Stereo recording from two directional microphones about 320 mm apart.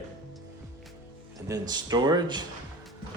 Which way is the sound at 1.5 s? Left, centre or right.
Centre.